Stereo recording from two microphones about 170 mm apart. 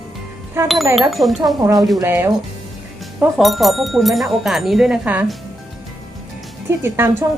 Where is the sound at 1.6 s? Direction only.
20° right (ahead or behind).